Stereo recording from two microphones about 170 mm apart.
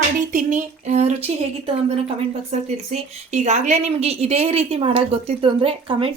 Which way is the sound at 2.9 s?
40° right (ahead or behind).